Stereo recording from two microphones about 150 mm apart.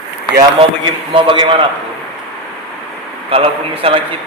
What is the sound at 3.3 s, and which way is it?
Speech, 40° right (ahead or behind).